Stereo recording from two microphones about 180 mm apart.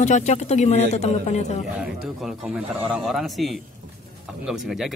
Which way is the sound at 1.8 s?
5° right (ahead or behind).